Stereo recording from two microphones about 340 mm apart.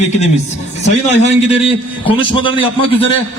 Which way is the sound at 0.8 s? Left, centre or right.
Centre.